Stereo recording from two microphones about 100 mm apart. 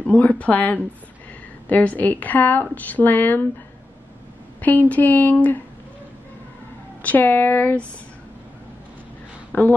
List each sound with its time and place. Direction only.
0.0 s a woman's voice: 15° left (ahead or behind)
4.6 s a woman's voice: 15° left (ahead or behind)
7.0 s a woman's voice: 15° left (ahead or behind)
9.5 s speech: 20° left (ahead or behind)